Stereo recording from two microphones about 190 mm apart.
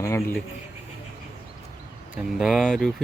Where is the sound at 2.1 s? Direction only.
5° right (ahead or behind).